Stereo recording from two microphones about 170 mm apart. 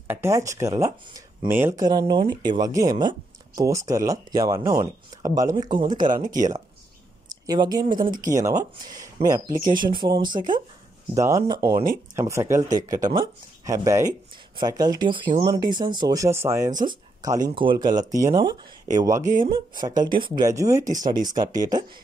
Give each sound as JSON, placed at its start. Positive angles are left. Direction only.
{"t": 0.1, "sound": "speech", "side_deg": -15}
{"t": 1.8, "sound": "speech", "side_deg": -25}
{"t": 5.8, "sound": "speech", "side_deg": -55}
{"t": 7.4, "sound": "speech", "side_deg": -25}
{"t": 21.0, "sound": "speech", "side_deg": -50}